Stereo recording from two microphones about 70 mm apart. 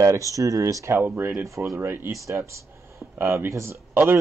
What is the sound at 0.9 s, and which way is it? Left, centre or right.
Speech, right.